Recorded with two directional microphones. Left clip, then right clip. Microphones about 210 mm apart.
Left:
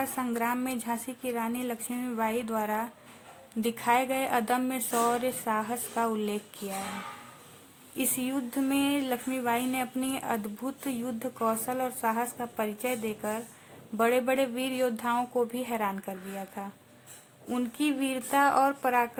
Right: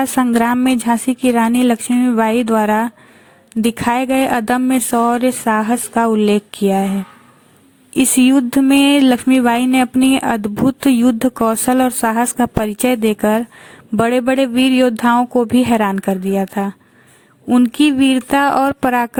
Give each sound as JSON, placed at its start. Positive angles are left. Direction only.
{"t": 0.0, "sound": "speech", "side_deg": -40}
{"t": 7.9, "sound": "speech", "side_deg": -45}